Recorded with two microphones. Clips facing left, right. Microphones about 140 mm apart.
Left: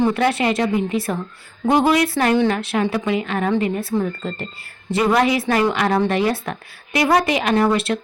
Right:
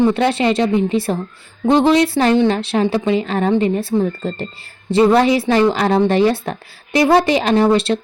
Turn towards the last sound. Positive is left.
turn(degrees=-30)  # may be behind; listen again after turning